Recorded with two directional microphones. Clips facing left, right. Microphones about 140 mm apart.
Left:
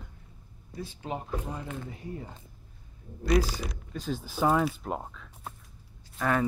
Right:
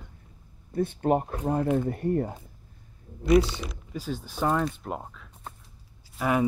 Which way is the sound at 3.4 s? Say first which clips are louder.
Even; 35° left (ahead or behind).